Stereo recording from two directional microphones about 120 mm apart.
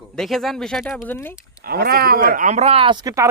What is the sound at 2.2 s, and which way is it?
Speech, 80° right.